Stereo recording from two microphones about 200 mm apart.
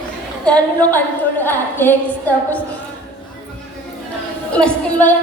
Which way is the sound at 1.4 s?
10° left (ahead or behind).